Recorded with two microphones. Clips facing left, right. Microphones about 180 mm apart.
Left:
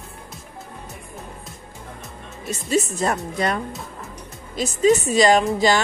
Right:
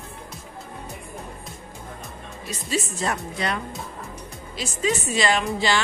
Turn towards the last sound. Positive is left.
turn(degrees=45)  # may be behind; listen again after turning